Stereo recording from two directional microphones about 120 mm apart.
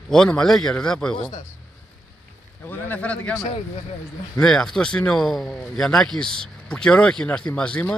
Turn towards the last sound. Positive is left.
turn(degrees=10)  # may be behind; listen again after turning